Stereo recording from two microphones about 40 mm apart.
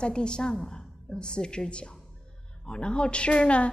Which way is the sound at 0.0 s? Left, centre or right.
Left.